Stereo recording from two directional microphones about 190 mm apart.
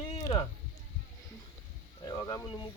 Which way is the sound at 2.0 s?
15° left (ahead or behind).